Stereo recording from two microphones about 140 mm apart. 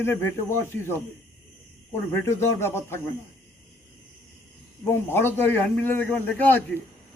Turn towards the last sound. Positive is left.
turn(degrees=10)  # may be behind; listen again after turning